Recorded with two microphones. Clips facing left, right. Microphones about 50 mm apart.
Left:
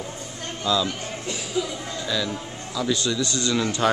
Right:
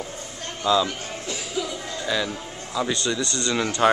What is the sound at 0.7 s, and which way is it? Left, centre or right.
Speech, right.